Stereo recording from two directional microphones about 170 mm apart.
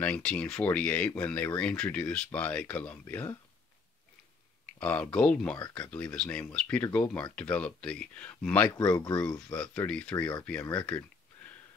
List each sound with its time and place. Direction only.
0.0 s speech: 5° left (ahead or behind)
4.7 s speech: 5° left (ahead or behind)
8.9 s speech: 25° left (ahead or behind)
9.5 s speech: 5° left (ahead or behind)